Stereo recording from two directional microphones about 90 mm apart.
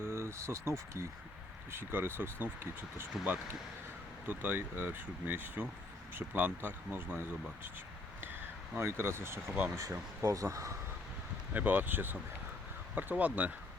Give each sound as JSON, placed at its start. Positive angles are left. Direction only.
{"t": 0.0, "sound": "speech", "side_deg": -30}
{"t": 4.3, "sound": "speech", "side_deg": -20}
{"t": 8.7, "sound": "speech", "side_deg": -30}
{"t": 11.5, "sound": "speech", "side_deg": -20}